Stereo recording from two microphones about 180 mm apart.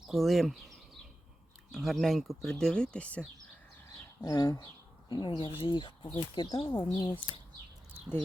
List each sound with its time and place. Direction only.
0.1 s speech: centre (ahead or behind)
1.7 s speech: centre (ahead or behind)
3.8 s speech: 20° left (ahead or behind)
6.7 s speech: 10° left (ahead or behind)